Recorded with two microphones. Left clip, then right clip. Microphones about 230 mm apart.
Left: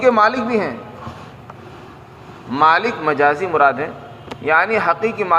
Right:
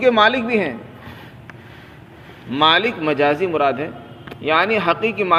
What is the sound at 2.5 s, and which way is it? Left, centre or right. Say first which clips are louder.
A man's voice: left 1 dB; right.